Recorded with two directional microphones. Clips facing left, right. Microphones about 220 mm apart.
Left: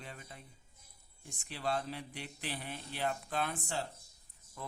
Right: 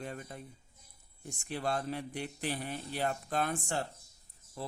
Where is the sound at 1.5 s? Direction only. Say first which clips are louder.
Right 3 dB; 50° right (ahead or behind).